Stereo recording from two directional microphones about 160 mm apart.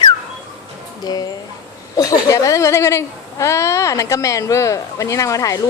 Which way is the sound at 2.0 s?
20° left (ahead or behind).